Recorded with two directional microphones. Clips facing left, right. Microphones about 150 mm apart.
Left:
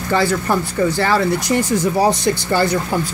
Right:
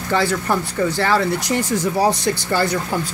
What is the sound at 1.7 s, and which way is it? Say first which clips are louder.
Speech: left 1 dB; 15° left (ahead or behind).